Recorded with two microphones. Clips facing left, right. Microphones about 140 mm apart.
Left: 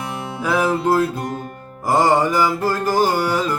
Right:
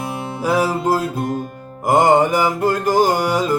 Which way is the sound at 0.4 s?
40° right (ahead or behind).